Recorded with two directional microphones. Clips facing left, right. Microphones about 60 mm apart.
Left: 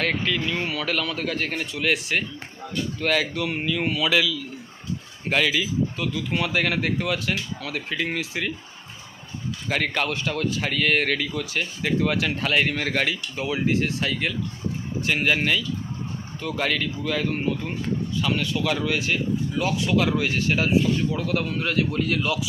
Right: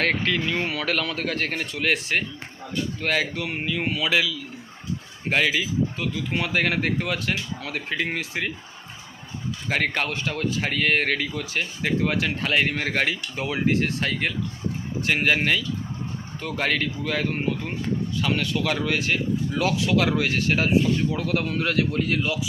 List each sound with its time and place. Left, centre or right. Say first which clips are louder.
0.3 s speech: right 1 dB; right
1.7 s speech: even; right
9.6 s speech: even; right
13.4 s speech: even; right
16.6 s speech: right 1 dB; right
19.5 s speech: right 1 dB; right
21.9 s speech: even; right